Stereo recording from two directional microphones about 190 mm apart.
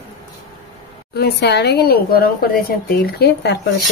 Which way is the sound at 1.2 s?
60° left (ahead or behind).